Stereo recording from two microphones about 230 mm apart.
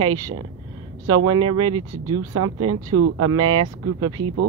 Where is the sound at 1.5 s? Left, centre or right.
Right.